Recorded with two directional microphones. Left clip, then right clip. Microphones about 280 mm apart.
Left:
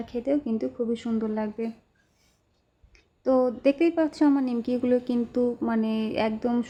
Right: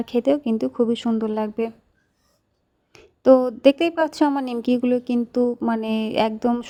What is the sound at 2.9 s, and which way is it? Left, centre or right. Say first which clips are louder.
A woman's voice: right 8 dB; right.